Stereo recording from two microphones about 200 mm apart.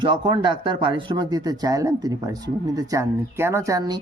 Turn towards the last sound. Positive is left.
turn(degrees=-20)  # may be behind; listen again after turning